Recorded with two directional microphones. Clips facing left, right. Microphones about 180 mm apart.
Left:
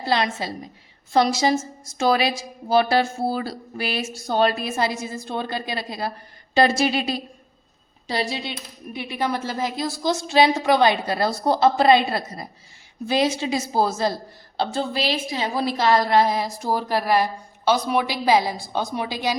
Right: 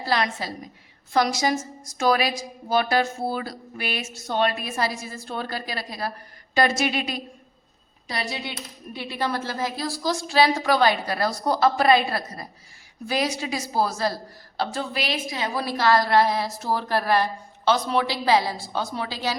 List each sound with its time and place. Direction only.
0.0 s a woman's voice: 25° left (ahead or behind)